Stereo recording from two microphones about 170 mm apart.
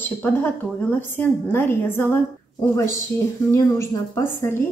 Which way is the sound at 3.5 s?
15° left (ahead or behind).